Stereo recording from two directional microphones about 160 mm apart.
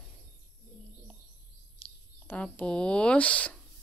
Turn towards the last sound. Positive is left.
turn(degrees=10)  # may be behind; listen again after turning